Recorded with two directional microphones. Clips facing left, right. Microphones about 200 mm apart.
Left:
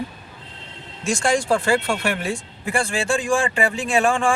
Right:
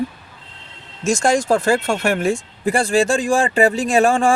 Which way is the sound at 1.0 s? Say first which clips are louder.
Right 4 dB; 45° right (ahead or behind).